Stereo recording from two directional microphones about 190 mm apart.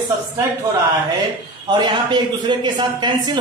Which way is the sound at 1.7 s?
25° right (ahead or behind).